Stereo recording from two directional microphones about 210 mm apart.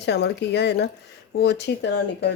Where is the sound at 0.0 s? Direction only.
55° left (ahead or behind).